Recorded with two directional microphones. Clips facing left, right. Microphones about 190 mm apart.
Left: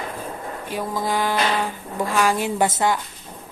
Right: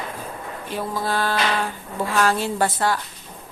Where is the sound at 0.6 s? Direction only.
15° left (ahead or behind).